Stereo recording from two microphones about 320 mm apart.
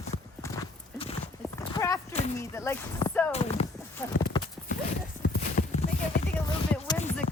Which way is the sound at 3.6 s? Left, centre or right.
Centre.